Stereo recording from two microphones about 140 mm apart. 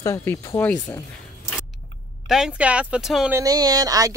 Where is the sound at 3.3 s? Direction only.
25° right (ahead or behind).